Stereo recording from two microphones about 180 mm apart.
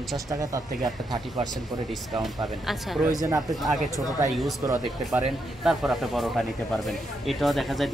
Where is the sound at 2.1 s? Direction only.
Centre (ahead or behind).